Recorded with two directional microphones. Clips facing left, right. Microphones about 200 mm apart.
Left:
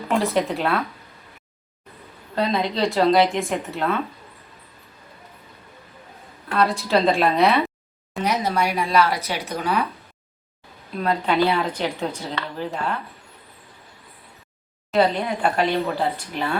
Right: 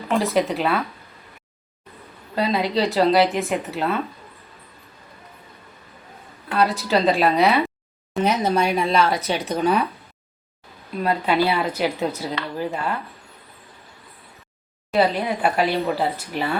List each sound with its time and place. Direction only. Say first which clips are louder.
0.3 s speech: right 1 dB; centre (ahead or behind)
2.3 s speech: right 1 dB; 5° right (ahead or behind)
6.5 s speech: even; centre (ahead or behind)
8.2 s speech: right 3 dB; 25° right (ahead or behind)
11.0 s speech: even; 10° right (ahead or behind)
14.9 s speech: even; 5° right (ahead or behind)